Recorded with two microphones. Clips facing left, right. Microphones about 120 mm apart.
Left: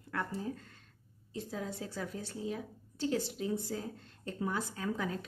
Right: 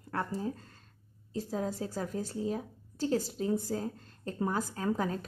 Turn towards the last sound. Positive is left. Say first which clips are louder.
# right 4 dB
turn(degrees=-40)  # may be behind; listen again after turning